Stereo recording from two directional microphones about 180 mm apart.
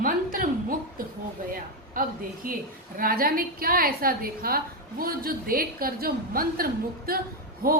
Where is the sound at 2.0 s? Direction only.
50° right (ahead or behind).